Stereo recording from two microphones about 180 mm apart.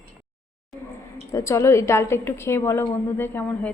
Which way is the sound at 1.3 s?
15° left (ahead or behind).